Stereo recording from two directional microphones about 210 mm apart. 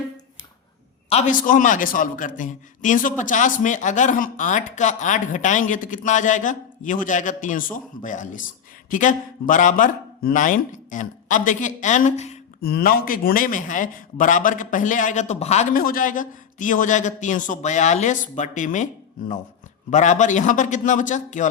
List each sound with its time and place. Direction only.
1.1 s a man's voice: 40° left (ahead or behind)
12.6 s a man's voice: 45° left (ahead or behind)
19.9 s a man's voice: 35° left (ahead or behind)